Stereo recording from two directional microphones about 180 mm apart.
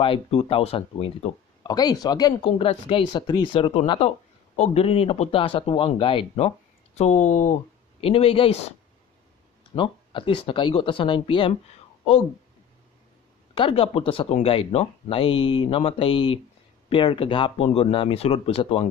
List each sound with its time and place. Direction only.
0.0 s speech: 30° left (ahead or behind)
8.0 s speech: 30° left (ahead or behind)
9.8 s speech: 30° left (ahead or behind)
13.6 s speech: 30° left (ahead or behind)